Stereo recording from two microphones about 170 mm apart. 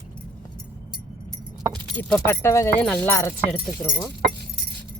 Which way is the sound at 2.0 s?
10° left (ahead or behind).